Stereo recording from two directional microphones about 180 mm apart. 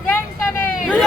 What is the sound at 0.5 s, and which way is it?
Hubbub, 10° left (ahead or behind).